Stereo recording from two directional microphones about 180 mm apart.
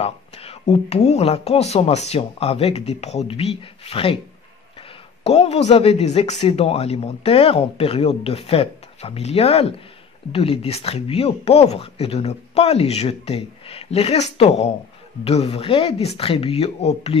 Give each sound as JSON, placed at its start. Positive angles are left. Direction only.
{"t": 0.0, "sound": "speech", "side_deg": 35}
{"t": 5.2, "sound": "speech", "side_deg": 35}